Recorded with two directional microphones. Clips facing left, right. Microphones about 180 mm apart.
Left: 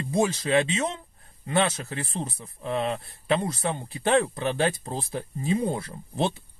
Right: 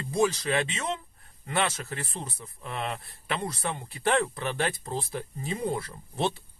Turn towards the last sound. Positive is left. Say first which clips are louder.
# left 3 dB
turn(degrees=25)  # may be behind; listen again after turning